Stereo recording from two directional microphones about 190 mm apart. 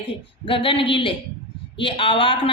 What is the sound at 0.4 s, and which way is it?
Speech, 30° left (ahead or behind).